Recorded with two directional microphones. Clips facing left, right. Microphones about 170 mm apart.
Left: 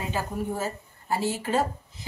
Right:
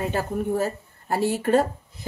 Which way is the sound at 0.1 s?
60° right (ahead or behind).